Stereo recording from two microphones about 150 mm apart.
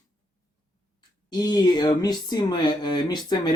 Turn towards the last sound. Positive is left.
turn(degrees=30)  # may be behind; listen again after turning